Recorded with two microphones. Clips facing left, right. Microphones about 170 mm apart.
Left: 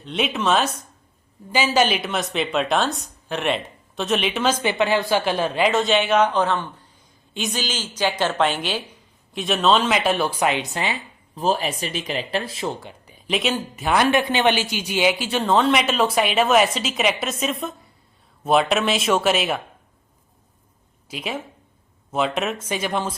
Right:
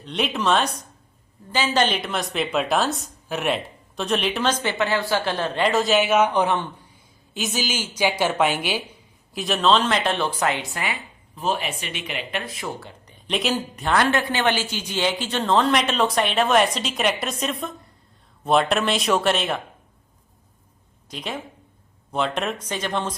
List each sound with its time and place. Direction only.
0.0 s a woman's voice: centre (ahead or behind); by 6.8 s 15° right (ahead or behind)
7.3 s a woman's voice: 5° right (ahead or behind); by 10.9 s 20° left (ahead or behind)
11.3 s speech: 35° left (ahead or behind)
13.1 s a woman's voice: 5° left (ahead or behind)
13.9 s a woman's voice: 15° left (ahead or behind)
21.1 s a woman's voice: 5° left (ahead or behind)